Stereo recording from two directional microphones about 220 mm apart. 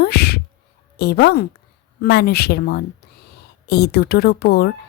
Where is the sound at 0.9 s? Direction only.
50° left (ahead or behind).